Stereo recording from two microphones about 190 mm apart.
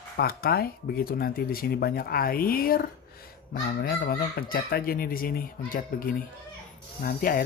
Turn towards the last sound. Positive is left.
turn(degrees=50)  # may be behind; listen again after turning